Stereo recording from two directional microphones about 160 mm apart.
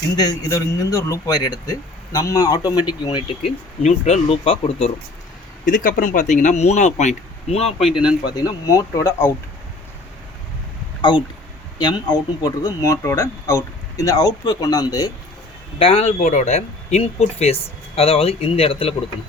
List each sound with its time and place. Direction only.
0.2 s a man's voice: 20° left (ahead or behind)
3.8 s speech: 40° left (ahead or behind)
5.6 s speech: 55° left (ahead or behind); by 7.9 s 40° left (ahead or behind)
7.9 s a man's voice: 30° left (ahead or behind)
11.1 s a man's voice: 30° left (ahead or behind)
15.8 s speech: 40° left (ahead or behind)